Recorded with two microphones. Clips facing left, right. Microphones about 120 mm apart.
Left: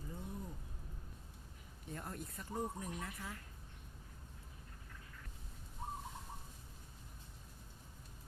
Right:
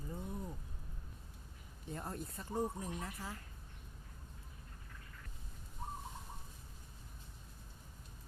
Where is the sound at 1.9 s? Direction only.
30° right (ahead or behind).